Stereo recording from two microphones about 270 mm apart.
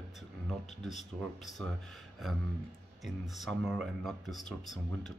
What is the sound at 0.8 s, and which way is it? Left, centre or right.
Speech, left.